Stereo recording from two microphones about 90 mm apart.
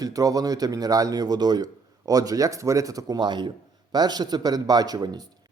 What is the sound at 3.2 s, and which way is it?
Speech, 55° right (ahead or behind).